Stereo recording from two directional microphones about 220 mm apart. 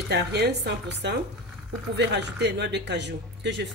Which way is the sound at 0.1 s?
50° right (ahead or behind).